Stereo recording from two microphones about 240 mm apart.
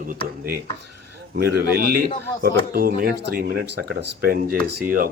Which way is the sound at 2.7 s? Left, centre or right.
Right.